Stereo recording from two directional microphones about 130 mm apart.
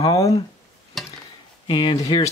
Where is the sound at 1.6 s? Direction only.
35° left (ahead or behind).